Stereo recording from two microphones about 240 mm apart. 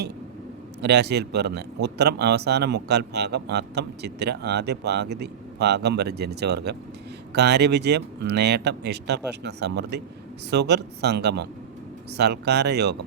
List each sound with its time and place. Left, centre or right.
0.8 s speech: right